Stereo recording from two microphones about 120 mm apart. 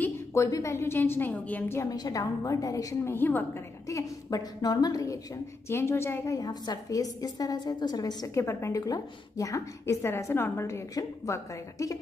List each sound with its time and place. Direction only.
0.0 s speech: 25° left (ahead or behind)
1.8 s speech: 30° left (ahead or behind)
3.2 s a woman's voice: 15° left (ahead or behind)
3.8 s speech: 30° left (ahead or behind)